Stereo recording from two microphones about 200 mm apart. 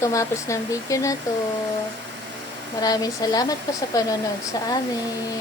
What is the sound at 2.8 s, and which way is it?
A woman's voice, 20° left (ahead or behind).